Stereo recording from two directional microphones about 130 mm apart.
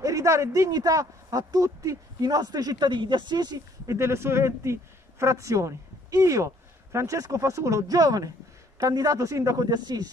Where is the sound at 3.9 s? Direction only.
20° right (ahead or behind).